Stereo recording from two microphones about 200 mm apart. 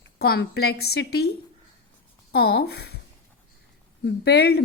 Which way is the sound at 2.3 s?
55° left (ahead or behind).